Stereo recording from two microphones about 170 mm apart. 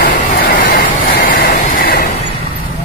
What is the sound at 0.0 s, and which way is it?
Vehicle, 55° left (ahead or behind).